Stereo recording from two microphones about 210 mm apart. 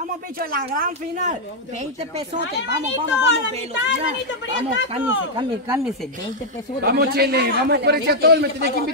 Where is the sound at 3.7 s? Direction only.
60° left (ahead or behind).